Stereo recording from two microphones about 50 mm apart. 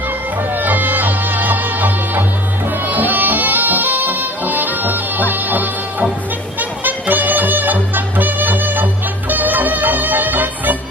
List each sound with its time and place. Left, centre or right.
0.5 s music: right